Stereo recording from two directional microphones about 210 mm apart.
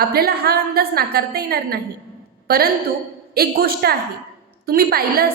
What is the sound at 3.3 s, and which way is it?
A woman's voice, 45° right (ahead or behind).